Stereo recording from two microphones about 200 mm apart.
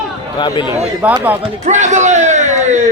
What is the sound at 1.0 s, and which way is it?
Speech, 10° right (ahead or behind).